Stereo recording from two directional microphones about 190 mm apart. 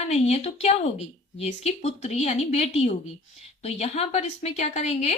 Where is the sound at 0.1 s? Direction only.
35° left (ahead or behind).